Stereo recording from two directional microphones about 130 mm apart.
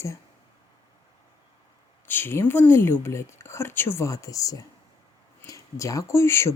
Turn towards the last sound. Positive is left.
turn(degrees=20)  # may be behind; listen again after turning